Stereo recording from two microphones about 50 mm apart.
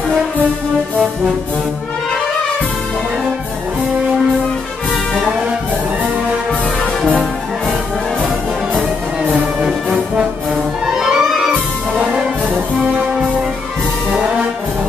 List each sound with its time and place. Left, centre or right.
9.6 s brass instrument: centre
11.0 s music: centre